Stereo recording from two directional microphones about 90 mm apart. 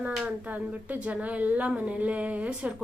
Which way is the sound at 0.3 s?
20° right (ahead or behind).